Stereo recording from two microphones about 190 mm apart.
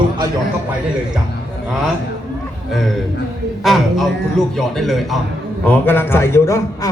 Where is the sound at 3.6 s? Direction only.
Centre (ahead or behind).